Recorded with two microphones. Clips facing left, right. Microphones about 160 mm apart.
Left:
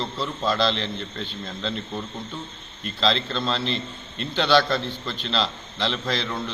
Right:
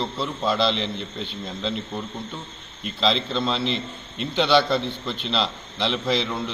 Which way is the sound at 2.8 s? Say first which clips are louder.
Right 1 dB; 5° right (ahead or behind).